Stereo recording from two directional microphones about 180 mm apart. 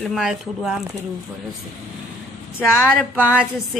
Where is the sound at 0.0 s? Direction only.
5° right (ahead or behind).